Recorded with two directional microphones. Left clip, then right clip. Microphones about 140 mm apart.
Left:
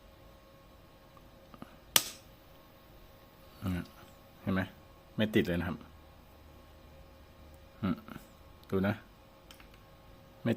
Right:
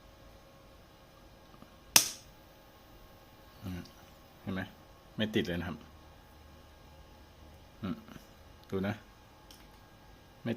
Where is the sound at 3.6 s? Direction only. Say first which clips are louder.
Left 6 dB; 55° left (ahead or behind).